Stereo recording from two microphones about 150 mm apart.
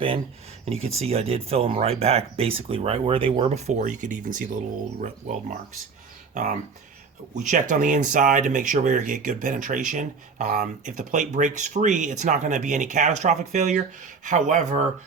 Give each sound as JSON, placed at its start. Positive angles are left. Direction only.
{"t": 0.6, "sound": "speech", "side_deg": -45}